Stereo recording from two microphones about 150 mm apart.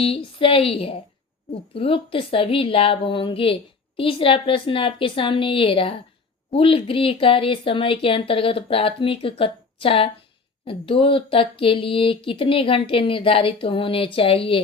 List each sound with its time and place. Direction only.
0.0 s a woman's voice: 40° left (ahead or behind)